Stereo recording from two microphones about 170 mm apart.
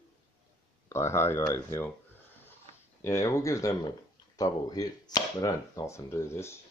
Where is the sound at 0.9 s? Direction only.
15° left (ahead or behind).